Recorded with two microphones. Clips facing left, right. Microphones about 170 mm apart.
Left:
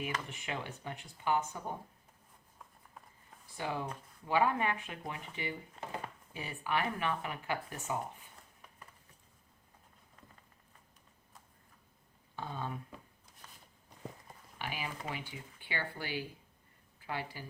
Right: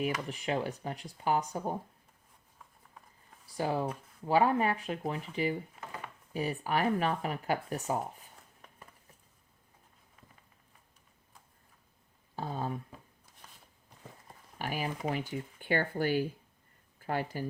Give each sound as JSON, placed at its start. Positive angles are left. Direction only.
{"t": 0.0, "sound": "speech", "side_deg": -35}
{"t": 3.6, "sound": "speech", "side_deg": -35}
{"t": 5.8, "sound": "a sound", "side_deg": -10}
{"t": 6.3, "sound": "speech", "side_deg": -40}
{"t": 12.4, "sound": "speech", "side_deg": -40}
{"t": 14.6, "sound": "speech", "side_deg": -45}